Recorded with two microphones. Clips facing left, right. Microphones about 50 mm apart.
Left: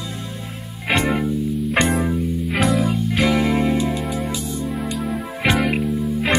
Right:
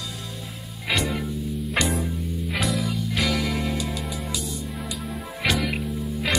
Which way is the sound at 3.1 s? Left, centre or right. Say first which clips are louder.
Left 7 dB; left.